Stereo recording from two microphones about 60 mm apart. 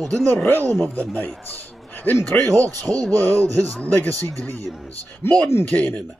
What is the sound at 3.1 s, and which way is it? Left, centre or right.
Speech, left.